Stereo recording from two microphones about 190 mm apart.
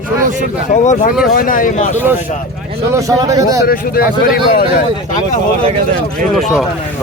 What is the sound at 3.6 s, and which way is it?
Speech, 50° left (ahead or behind).